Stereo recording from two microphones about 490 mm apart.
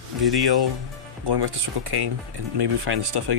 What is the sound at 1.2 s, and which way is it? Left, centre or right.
Speech, right.